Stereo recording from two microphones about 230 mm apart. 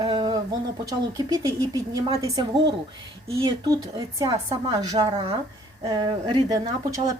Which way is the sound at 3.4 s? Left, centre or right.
Centre.